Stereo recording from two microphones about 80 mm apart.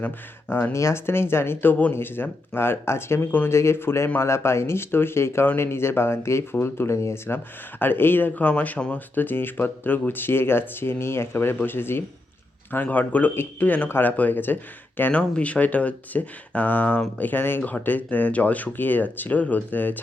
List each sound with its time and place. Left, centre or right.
0.0 s speech: left